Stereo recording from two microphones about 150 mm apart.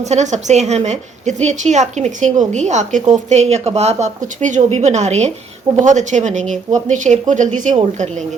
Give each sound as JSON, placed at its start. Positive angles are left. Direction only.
{"t": 0.0, "sound": "a woman's voice", "side_deg": -50}